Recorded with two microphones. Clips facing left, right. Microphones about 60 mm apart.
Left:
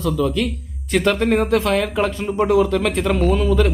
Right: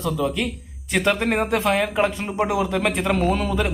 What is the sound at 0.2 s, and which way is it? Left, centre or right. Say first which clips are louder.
A man's voice: left 4 dB; centre.